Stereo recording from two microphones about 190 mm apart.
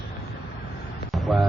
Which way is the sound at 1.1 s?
Centre (ahead or behind).